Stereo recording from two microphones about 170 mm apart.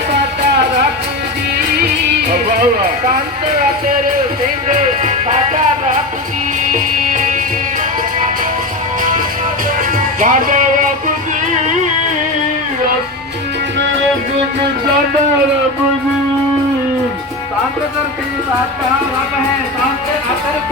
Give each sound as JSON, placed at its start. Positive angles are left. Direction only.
{"t": 4.7, "sound": "music", "side_deg": -40}
{"t": 7.1, "sound": "music", "side_deg": -50}
{"t": 10.2, "sound": "music", "side_deg": -50}